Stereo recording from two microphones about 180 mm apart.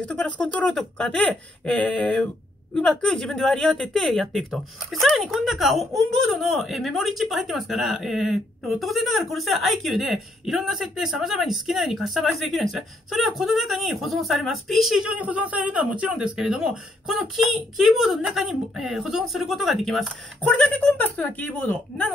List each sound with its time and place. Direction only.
0.0 s speech: 5° left (ahead or behind)